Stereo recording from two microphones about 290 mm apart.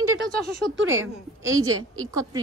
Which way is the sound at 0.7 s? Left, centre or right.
Right.